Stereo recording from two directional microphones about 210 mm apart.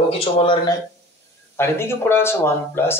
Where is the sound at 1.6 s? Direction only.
10° left (ahead or behind).